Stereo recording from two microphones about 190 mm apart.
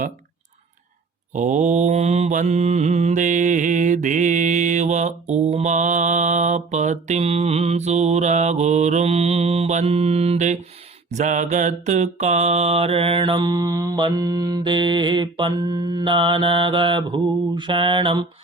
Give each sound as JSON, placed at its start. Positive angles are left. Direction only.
{"t": 1.3, "sound": "mantra", "side_deg": -40}